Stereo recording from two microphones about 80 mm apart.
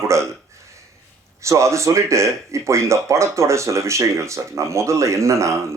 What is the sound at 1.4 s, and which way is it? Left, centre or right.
Speech, right.